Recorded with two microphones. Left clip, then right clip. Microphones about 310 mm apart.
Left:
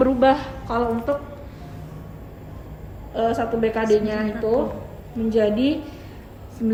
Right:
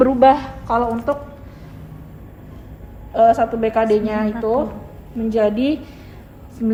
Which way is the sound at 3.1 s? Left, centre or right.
Centre.